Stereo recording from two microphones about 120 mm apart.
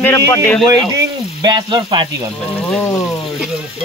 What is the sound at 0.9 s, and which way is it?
Speech, 30° right (ahead or behind).